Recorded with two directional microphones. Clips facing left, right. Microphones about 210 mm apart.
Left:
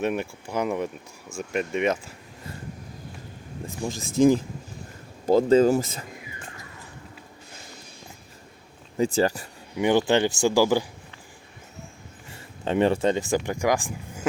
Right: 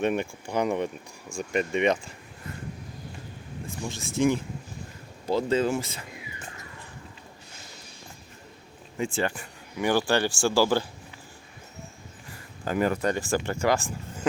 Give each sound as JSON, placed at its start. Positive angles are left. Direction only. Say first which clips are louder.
{"t": 0.0, "sound": "speech", "louder": "even", "side_deg": 5}
{"t": 4.2, "sound": "speech", "louder": "left 5 dB", "side_deg": 35}
{"t": 9.0, "sound": "speech", "louder": "left 6 dB", "side_deg": 40}
{"t": 9.7, "sound": "speech", "louder": "left 4 dB", "side_deg": 20}
{"t": 12.3, "sound": "speech", "louder": "left 4 dB", "side_deg": 25}